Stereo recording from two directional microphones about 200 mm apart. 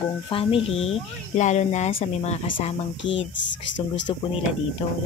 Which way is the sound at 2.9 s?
65° left (ahead or behind).